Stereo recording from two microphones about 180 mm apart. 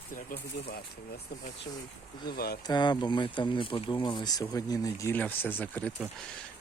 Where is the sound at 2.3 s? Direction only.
60° left (ahead or behind).